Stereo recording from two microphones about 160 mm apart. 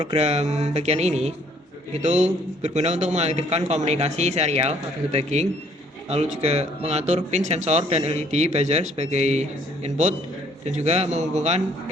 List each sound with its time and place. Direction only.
0.0 s speech: 40° right (ahead or behind)
2.6 s speech: 45° right (ahead or behind)